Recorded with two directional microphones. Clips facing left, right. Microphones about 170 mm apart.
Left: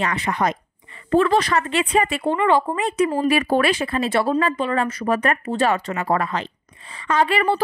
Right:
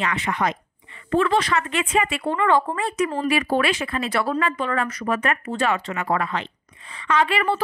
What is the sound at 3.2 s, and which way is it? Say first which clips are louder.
A woman's voice: left 1 dB; 40° left (ahead or behind).